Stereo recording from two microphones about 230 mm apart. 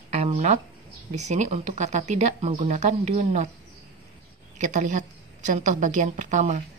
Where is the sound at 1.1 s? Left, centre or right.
Right.